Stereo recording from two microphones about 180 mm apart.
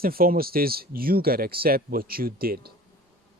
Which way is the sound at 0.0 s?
55° right (ahead or behind).